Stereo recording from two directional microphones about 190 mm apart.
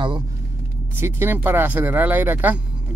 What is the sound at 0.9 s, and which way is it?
Speech, 10° right (ahead or behind).